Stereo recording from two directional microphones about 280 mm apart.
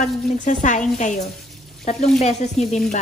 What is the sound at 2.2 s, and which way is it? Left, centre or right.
Speech, left.